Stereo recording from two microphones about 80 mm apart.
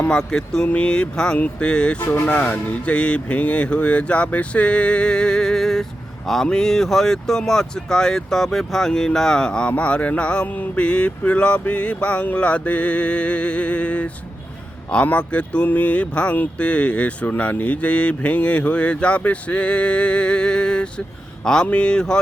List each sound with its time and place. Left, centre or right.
0.1 s speech: centre